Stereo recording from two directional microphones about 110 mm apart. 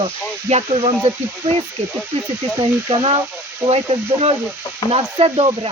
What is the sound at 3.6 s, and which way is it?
Speech, 65° right (ahead or behind).